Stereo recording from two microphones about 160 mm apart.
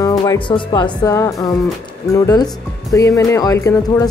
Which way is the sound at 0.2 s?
25° left (ahead or behind).